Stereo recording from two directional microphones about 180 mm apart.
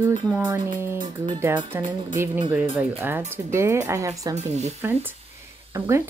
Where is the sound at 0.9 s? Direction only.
25° right (ahead or behind).